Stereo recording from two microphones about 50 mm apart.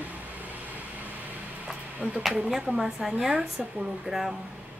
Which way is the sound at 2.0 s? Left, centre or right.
Right.